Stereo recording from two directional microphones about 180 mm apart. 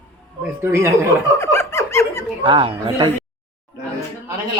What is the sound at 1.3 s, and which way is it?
Speech, 15° left (ahead or behind).